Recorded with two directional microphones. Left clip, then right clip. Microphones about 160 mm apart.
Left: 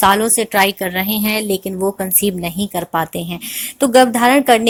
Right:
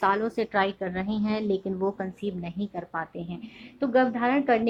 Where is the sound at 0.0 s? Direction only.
35° left (ahead or behind).